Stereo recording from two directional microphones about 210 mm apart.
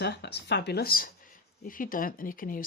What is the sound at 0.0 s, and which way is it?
Speech, 50° left (ahead or behind).